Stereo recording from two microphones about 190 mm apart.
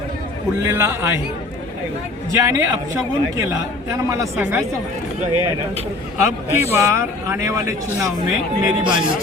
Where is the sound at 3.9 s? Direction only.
15° right (ahead or behind).